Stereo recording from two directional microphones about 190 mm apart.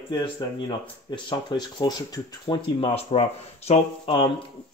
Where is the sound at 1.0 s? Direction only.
25° left (ahead or behind).